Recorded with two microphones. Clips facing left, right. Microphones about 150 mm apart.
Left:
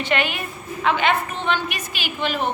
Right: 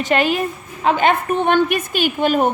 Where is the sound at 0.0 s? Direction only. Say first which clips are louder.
Right 6 dB; 40° right (ahead or behind).